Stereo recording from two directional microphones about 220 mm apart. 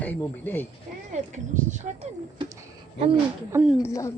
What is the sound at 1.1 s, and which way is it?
Speech, 35° right (ahead or behind).